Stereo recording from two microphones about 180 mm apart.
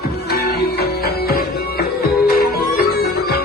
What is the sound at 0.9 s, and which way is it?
Music, 60° left (ahead or behind).